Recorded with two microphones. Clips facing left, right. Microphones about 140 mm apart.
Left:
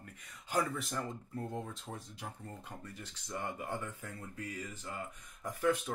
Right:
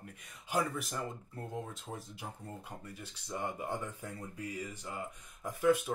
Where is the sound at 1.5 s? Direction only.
5° right (ahead or behind).